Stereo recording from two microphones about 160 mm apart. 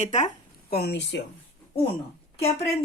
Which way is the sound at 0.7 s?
85° left.